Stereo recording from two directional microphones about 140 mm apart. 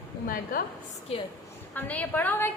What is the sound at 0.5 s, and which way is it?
Speech, 75° left (ahead or behind).